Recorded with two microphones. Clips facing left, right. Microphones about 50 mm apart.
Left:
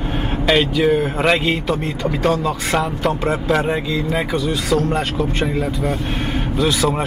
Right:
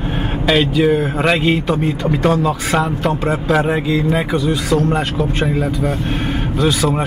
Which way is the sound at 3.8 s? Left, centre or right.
Right.